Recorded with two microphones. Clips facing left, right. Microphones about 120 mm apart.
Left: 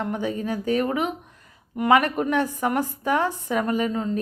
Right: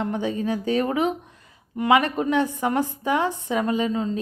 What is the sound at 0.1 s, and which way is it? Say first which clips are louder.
A woman's voice: right 2 dB; 30° right (ahead or behind).